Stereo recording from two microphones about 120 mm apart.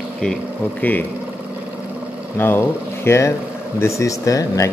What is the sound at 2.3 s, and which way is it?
Speech, 15° left (ahead or behind).